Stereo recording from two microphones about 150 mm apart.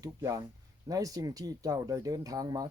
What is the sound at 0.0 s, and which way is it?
Speech, 25° right (ahead or behind).